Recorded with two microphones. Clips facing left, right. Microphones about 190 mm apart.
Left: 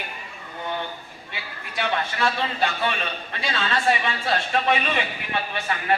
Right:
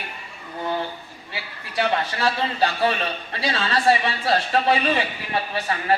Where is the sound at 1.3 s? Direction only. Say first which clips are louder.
Right 2 dB; 35° right (ahead or behind).